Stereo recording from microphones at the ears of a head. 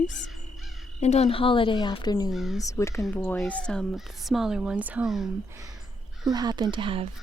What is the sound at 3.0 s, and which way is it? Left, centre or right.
Speech, centre.